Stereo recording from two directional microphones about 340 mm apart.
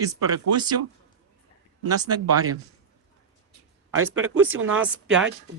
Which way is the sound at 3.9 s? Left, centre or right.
Right.